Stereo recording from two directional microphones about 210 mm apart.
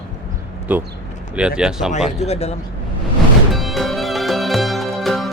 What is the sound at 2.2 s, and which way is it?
Speech, 30° left (ahead or behind).